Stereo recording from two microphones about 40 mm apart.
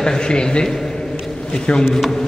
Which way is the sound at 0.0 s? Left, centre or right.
Centre.